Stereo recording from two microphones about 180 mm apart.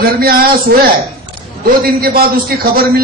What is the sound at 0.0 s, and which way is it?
Speech, 55° right (ahead or behind).